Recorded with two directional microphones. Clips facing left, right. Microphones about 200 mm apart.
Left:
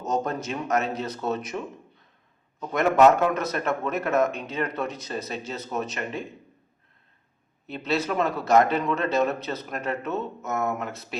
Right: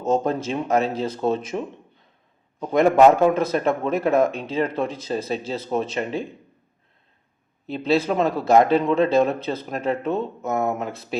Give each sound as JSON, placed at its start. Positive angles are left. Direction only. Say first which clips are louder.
{"t": 0.0, "sound": "speech", "louder": "right 6 dB", "side_deg": -30}
{"t": 7.9, "sound": "speech", "louder": "right 5 dB", "side_deg": -30}